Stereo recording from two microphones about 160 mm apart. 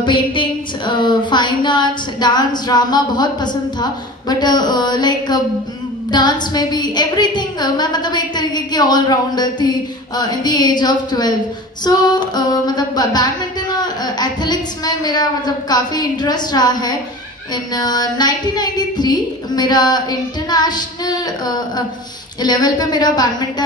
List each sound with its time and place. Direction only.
0.0 s a woman's voice: 30° left (ahead or behind)